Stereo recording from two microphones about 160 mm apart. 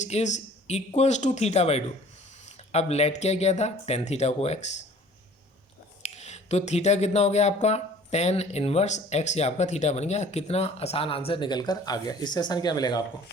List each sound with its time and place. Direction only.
0.0 s speech: 45° left (ahead or behind)
6.0 s speech: 45° left (ahead or behind); by 13.0 s 25° left (ahead or behind)